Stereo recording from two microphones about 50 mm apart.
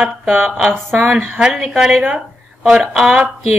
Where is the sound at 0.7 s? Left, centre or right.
Centre.